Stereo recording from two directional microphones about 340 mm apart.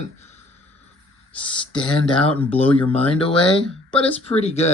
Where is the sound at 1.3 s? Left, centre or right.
Centre.